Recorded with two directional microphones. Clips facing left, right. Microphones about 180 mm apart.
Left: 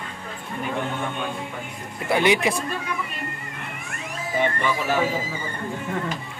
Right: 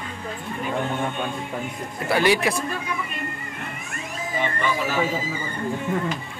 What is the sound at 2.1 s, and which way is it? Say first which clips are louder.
Speech: even; 20° left (ahead or behind).